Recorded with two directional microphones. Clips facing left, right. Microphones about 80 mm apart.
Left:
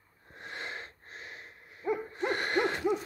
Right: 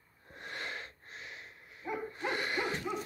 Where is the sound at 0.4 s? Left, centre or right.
Left.